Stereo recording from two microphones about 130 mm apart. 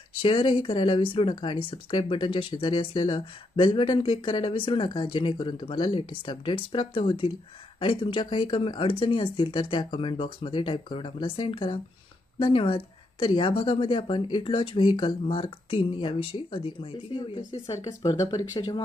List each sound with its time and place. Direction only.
0.2 s speech: 40° left (ahead or behind)
17.6 s speech: 25° left (ahead or behind)